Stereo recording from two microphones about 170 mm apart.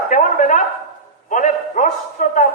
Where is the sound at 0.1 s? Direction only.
50° left (ahead or behind).